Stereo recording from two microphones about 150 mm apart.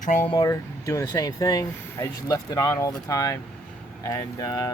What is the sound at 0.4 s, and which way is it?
Speech, 20° left (ahead or behind).